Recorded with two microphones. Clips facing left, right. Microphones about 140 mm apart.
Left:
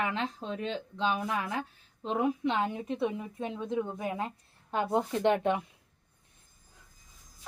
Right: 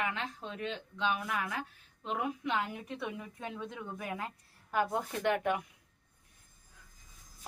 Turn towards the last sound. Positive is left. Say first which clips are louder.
# left 4 dB
turn(degrees=25)  # may be behind; listen again after turning